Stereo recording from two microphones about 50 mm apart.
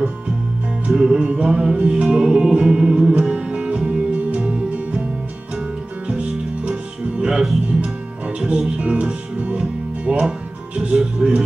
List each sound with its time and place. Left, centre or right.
0.9 s music: centre
1.2 s music: right
6.0 s music: right
8.4 s speech: centre
10.8 s music: centre